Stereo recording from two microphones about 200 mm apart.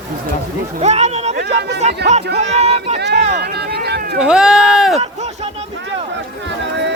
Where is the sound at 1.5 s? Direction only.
55° right (ahead or behind).